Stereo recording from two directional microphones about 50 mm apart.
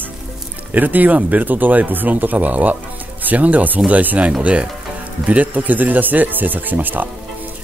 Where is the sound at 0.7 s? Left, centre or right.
Right.